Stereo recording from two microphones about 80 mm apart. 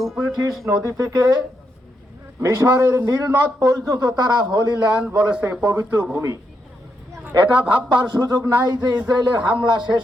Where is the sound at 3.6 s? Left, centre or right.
Right.